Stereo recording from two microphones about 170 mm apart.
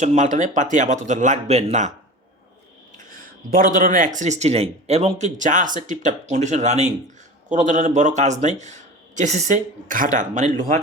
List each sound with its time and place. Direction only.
0.0 s speech: 45° right (ahead or behind)
3.0 s speech: 55° right (ahead or behind)